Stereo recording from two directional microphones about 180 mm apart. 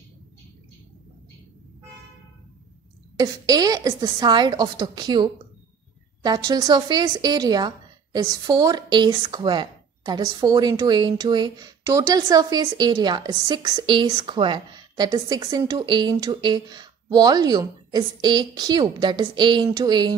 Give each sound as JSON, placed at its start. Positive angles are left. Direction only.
{"t": 3.2, "sound": "a woman's voice", "side_deg": -20}